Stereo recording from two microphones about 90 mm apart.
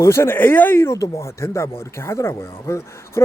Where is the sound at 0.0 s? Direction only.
30° left (ahead or behind).